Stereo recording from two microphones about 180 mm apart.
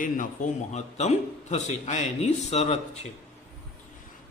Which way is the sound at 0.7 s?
40° left (ahead or behind).